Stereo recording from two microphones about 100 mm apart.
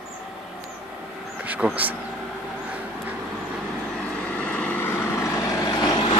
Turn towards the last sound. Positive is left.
turn(degrees=40)  # may be behind; listen again after turning